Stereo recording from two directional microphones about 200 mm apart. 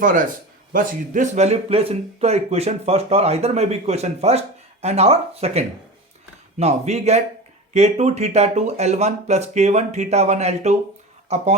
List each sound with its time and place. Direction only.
0.0 s speech: 40° right (ahead or behind)